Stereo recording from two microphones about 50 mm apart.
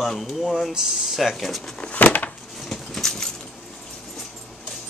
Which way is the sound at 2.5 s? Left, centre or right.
Centre.